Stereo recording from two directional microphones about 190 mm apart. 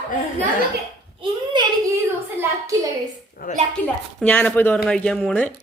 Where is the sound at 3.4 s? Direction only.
50° left (ahead or behind).